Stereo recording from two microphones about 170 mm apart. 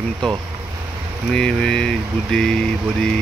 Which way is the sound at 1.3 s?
5° left (ahead or behind).